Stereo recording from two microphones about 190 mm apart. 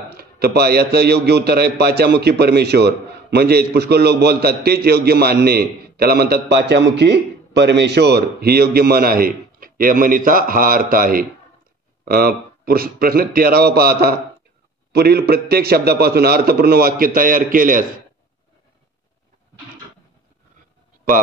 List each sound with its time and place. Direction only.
0.2 s a man's voice: 55° right (ahead or behind)